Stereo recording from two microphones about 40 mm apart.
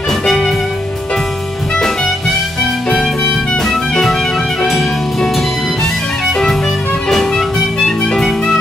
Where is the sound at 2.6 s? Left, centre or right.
Centre.